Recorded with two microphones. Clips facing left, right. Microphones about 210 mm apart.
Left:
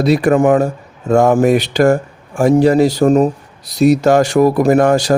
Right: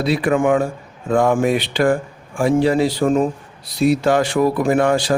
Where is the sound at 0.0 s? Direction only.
45° left (ahead or behind).